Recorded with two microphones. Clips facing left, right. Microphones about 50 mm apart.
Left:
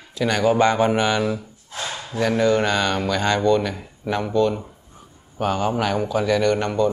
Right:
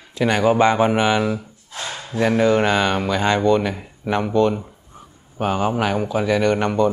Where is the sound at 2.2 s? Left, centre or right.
Centre.